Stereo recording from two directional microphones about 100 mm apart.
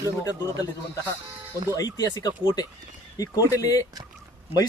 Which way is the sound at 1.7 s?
35° left (ahead or behind).